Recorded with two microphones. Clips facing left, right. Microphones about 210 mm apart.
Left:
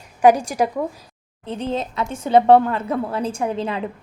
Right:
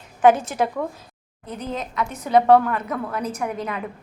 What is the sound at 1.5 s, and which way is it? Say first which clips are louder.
A woman's voice: left 5 dB; 30° left (ahead or behind).